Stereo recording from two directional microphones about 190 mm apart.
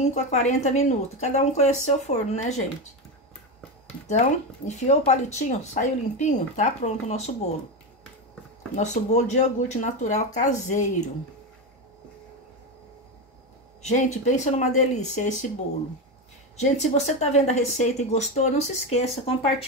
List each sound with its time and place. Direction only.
0.1 s speech: 35° left (ahead or behind)
4.1 s speech: 35° left (ahead or behind)
8.7 s speech: 40° left (ahead or behind)
13.8 s speech: 35° left (ahead or behind)
16.5 s speech: 35° left (ahead or behind)